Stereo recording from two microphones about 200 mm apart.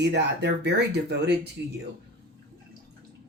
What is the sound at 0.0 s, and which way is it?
Speech, 60° right (ahead or behind).